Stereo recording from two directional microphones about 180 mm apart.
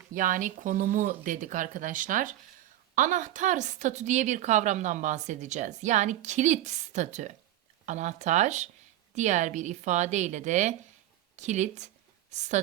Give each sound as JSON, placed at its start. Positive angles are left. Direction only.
{"t": 0.1, "sound": "a woman's voice", "side_deg": -45}